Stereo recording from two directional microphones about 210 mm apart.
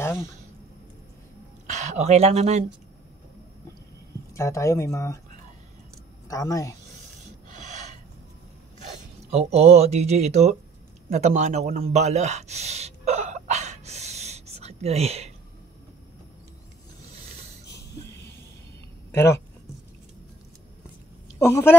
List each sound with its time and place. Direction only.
1.7 s speech: 35° right (ahead or behind)
4.3 s speech: 15° left (ahead or behind)
6.2 s speech: 15° left (ahead or behind)
7.4 s filing: 35° right (ahead or behind)
9.3 s speech: 30° right (ahead or behind)
11.1 s a sound: 35° right (ahead or behind)
19.1 s speech: 10° left (ahead or behind)
21.4 s speech: 10° left (ahead or behind)